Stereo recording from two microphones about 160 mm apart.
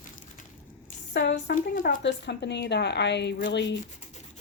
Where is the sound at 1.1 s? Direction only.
80° left.